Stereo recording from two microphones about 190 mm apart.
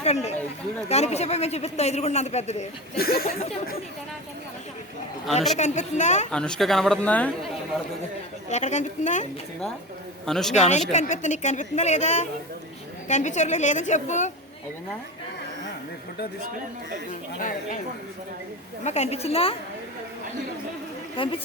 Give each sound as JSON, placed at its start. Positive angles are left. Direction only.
{"t": 0.0, "sound": "speech", "side_deg": 35}
{"t": 3.0, "sound": "speech", "side_deg": 55}
{"t": 5.5, "sound": "speech", "side_deg": 35}
{"t": 6.3, "sound": "speech", "side_deg": 5}
{"t": 8.4, "sound": "speech", "side_deg": 40}
{"t": 10.2, "sound": "speech", "side_deg": 0}
{"t": 10.5, "sound": "speech", "side_deg": 40}
{"t": 17.1, "sound": "speech", "side_deg": 45}
{"t": 18.9, "sound": "speech", "side_deg": 35}
{"t": 21.2, "sound": "a woman's voice", "side_deg": 25}